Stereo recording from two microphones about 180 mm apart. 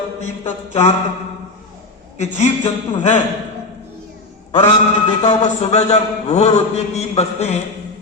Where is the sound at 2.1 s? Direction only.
40° left (ahead or behind).